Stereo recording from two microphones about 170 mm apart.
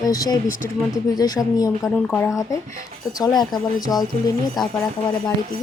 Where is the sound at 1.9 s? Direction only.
10° left (ahead or behind).